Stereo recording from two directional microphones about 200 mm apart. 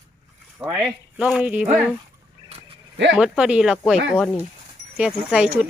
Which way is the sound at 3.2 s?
5° right (ahead or behind).